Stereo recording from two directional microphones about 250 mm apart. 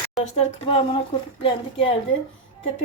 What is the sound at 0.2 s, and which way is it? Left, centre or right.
Speech, left.